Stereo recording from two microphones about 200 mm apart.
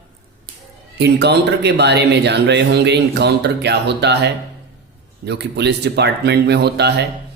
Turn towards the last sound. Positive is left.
turn(degrees=-55)  # may be behind; listen again after turning